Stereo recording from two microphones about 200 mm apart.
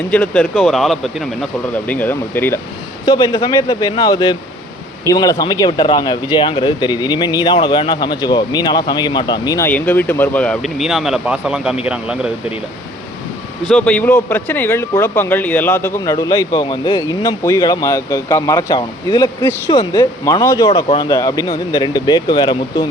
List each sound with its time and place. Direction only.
0.1 s speech: 5° left (ahead or behind)
13.7 s speech: 5° left (ahead or behind)